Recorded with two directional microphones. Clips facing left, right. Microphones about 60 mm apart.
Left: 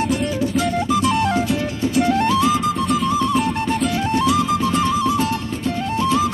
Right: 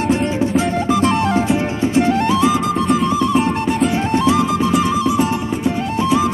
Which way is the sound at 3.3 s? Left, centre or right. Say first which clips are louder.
Right 3 dB; right.